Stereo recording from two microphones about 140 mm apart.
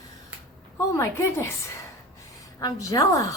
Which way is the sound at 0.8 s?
20° left (ahead or behind).